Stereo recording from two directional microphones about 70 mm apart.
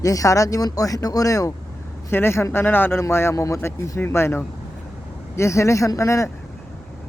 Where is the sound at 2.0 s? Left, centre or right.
Left.